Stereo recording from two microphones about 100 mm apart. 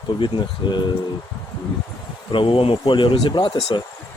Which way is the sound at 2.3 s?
60° left (ahead or behind).